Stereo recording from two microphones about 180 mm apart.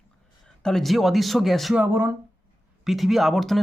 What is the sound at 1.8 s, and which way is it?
Speech, 15° right (ahead or behind).